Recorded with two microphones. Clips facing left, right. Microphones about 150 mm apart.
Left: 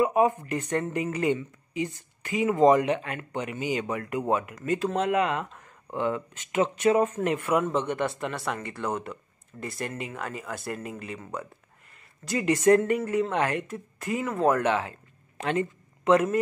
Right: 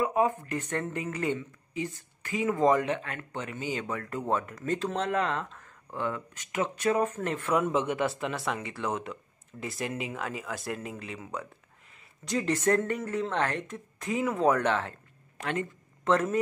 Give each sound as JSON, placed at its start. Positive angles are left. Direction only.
{"t": 0.0, "sound": "speech", "side_deg": 15}
{"t": 7.6, "sound": "speech", "side_deg": -5}
{"t": 15.3, "sound": "a sound", "side_deg": 20}